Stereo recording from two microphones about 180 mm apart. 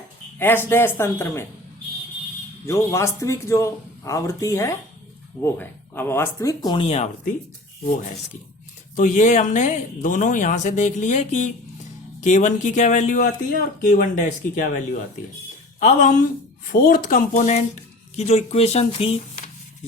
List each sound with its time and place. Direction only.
0.3 s a man's voice: 10° left (ahead or behind)
2.6 s a man's voice: 15° left (ahead or behind); by 7.3 s 35° left (ahead or behind)
9.0 s speech: 45° left (ahead or behind)
15.8 s speech: 45° left (ahead or behind)